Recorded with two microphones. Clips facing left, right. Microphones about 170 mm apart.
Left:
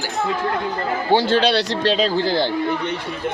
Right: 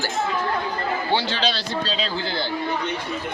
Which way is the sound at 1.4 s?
70° left (ahead or behind).